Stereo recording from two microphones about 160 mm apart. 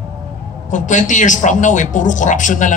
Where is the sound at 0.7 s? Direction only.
50° left (ahead or behind).